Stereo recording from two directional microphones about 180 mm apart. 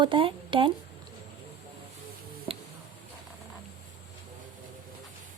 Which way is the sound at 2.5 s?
30° right (ahead or behind).